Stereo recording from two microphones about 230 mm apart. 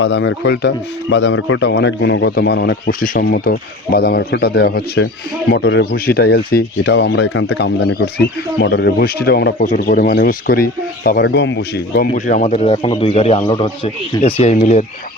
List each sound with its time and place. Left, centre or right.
0.0 s speech: left
12.1 s a man's voice: left